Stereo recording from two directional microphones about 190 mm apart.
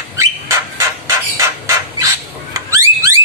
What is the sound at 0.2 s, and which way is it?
Bird, 15° right (ahead or behind).